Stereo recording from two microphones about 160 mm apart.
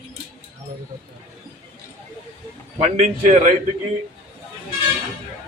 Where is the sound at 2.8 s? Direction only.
45° right (ahead or behind).